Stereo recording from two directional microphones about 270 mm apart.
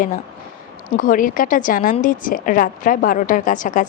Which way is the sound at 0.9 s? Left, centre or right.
Left.